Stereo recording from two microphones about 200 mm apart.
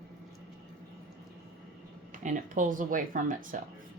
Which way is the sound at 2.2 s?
40° right (ahead or behind).